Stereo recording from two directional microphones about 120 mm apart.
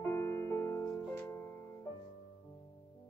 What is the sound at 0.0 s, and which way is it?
Music, 20° left (ahead or behind).